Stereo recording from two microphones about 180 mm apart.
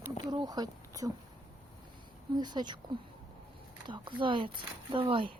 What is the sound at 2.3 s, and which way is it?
Speech, 25° right (ahead or behind).